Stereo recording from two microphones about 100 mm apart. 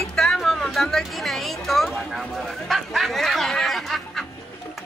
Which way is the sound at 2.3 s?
Centre (ahead or behind).